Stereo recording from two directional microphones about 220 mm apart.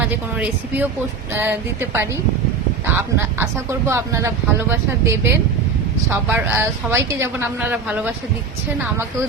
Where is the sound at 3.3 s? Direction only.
15° right (ahead or behind).